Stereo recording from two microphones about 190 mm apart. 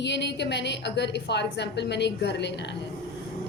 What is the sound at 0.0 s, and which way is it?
A woman's voice, 65° left (ahead or behind).